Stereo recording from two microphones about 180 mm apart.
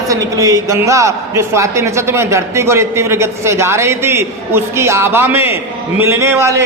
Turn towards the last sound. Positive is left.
turn(degrees=-15)  # may be behind; listen again after turning